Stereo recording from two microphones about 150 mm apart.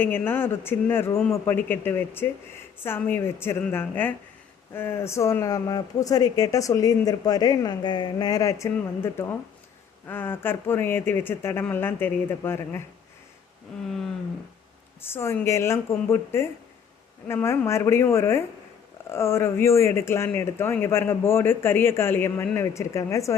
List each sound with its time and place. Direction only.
0.0 s speech: 15° left (ahead or behind)
13.8 s a sound: centre (ahead or behind)
15.0 s speech: 15° left (ahead or behind)